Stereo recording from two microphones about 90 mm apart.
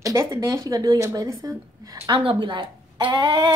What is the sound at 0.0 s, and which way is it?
Speech, 35° right (ahead or behind).